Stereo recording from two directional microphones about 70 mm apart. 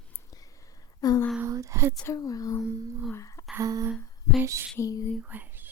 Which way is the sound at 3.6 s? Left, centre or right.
Right.